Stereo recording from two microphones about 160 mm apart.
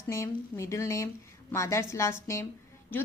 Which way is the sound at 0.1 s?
20° left (ahead or behind).